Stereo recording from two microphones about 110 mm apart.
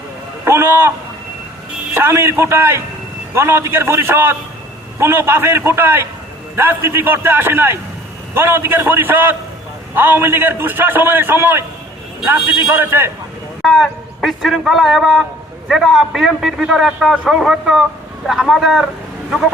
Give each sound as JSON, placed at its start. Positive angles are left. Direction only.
{"t": 0.4, "sound": "a sound", "side_deg": -20}
{"t": 1.9, "sound": "a man's voice", "side_deg": -20}
{"t": 13.6, "sound": "a man's voice", "side_deg": 0}